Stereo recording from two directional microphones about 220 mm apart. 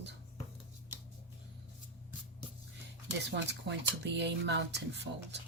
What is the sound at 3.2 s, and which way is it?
Speech, 55° right (ahead or behind).